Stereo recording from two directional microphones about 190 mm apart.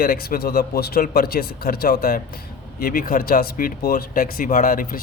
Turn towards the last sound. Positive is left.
turn(degrees=45)  # may be behind; listen again after turning